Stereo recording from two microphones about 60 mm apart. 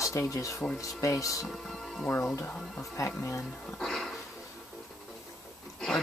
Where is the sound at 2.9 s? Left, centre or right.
Left.